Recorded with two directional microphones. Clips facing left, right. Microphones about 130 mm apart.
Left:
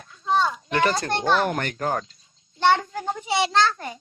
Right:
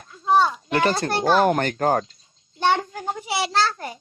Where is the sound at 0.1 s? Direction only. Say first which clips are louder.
Right 4 dB; 35° right (ahead or behind).